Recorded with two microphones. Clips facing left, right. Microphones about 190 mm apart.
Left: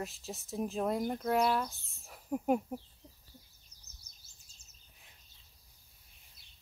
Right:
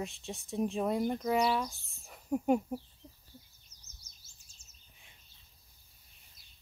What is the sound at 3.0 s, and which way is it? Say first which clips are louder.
Chicken: right 3 dB; 10° left (ahead or behind).